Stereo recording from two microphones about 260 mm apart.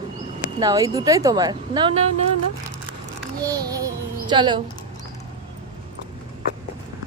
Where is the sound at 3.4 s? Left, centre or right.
Centre.